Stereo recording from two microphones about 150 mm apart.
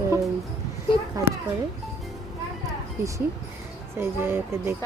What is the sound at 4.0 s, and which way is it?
Speech, 15° right (ahead or behind).